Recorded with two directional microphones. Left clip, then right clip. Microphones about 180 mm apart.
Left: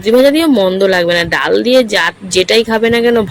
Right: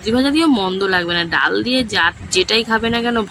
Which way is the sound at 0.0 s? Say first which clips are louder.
Left 7 dB; 10° left (ahead or behind).